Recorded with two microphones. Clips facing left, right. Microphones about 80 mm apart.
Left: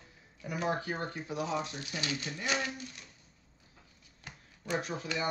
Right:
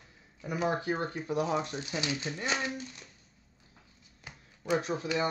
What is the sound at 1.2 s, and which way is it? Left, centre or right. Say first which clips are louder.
Speech: right 4 dB; right.